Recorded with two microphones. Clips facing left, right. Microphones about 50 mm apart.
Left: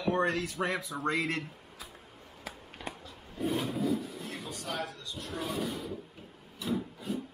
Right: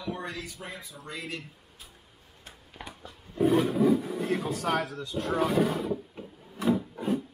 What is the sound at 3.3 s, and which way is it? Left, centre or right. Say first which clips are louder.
Roar: right 9 dB; centre.